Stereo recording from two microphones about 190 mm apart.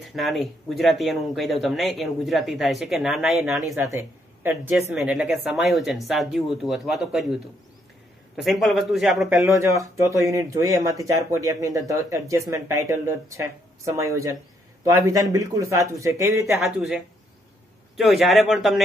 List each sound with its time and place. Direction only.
0.1 s a woman's voice: centre (ahead or behind)
3.7 s a woman's voice: 15° right (ahead or behind)
8.4 s a woman's voice: centre (ahead or behind)
9.5 s speech: 15° right (ahead or behind)
15.3 s speech: 15° right (ahead or behind)
16.6 s a woman's voice: 5° right (ahead or behind)